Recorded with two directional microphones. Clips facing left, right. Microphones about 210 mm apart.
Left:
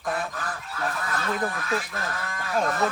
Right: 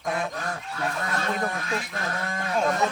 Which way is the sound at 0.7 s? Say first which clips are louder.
Even; 25° right (ahead or behind).